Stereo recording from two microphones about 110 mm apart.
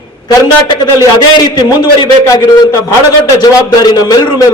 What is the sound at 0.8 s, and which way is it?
A man's voice, 40° left (ahead or behind).